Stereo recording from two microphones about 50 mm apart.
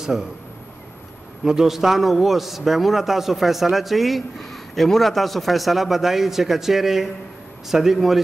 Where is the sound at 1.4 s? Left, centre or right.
Centre.